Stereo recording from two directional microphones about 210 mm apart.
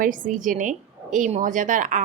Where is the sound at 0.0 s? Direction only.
40° right (ahead or behind).